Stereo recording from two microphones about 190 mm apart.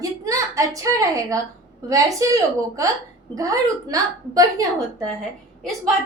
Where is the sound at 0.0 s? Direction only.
15° right (ahead or behind).